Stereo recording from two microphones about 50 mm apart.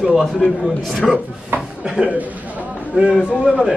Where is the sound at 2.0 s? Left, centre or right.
Right.